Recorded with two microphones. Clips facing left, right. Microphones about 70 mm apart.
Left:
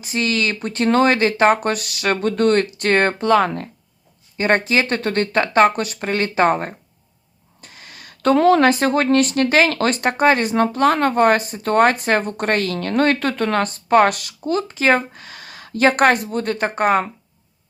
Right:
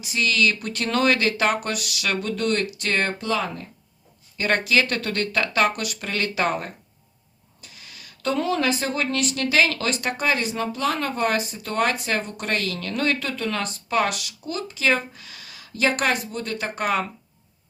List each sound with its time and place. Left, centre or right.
0.0 s speech: left
4.4 s a woman's voice: left